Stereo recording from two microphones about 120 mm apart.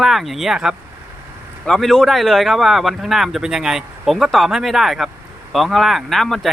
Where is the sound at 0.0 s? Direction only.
Centre (ahead or behind).